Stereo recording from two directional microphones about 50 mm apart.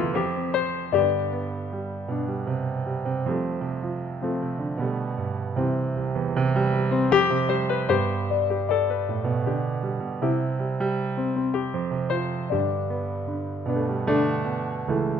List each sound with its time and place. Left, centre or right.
0.0 s music: centre
5.6 s music: centre
7.2 s music: left; by 8.9 s centre
10.2 s music: centre
13.7 s music: centre